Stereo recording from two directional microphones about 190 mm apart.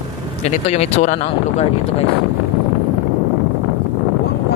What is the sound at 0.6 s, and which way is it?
Speech, 35° left (ahead or behind).